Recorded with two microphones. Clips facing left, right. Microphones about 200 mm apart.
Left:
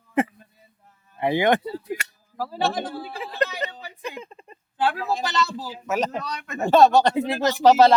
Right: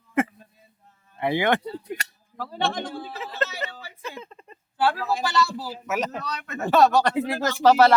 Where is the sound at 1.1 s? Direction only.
20° left (ahead or behind).